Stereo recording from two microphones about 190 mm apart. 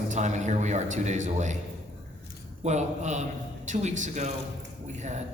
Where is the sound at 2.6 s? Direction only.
35° right (ahead or behind).